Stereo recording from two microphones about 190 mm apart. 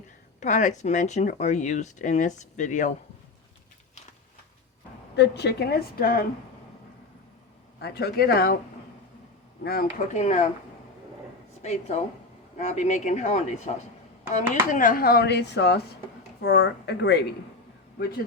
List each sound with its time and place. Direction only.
0.3 s speech: 40° left (ahead or behind)
5.1 s a woman's voice: 60° left (ahead or behind)
7.8 s a woman's voice: 55° left (ahead or behind)
9.6 s speech: 55° left (ahead or behind)
10.2 s speech: 40° left (ahead or behind)
11.6 s a woman's voice: 35° left (ahead or behind); by 17.2 s 65° left (ahead or behind)